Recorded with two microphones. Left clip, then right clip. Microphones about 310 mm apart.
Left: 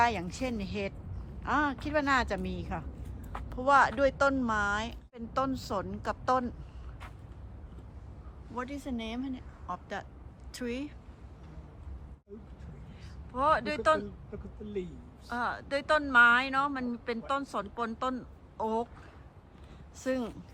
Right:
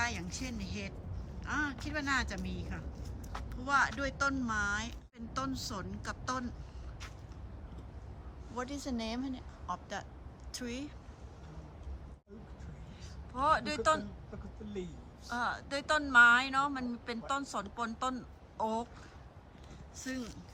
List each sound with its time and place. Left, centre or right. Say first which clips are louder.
0.0 s speech: left 9 dB; centre
8.7 s speech: left 1 dB; right
9.6 s speech: left 2 dB; centre
13.3 s speech: left 3 dB; centre
15.3 s speech: left 3 dB; centre
20.0 s speech: left 9 dB; centre